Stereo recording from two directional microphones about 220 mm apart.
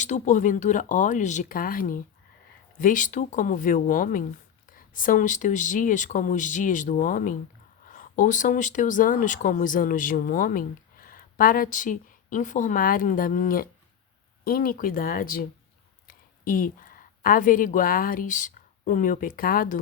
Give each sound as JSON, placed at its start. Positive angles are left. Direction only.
{"t": 0.0, "sound": "a woman's voice", "side_deg": 35}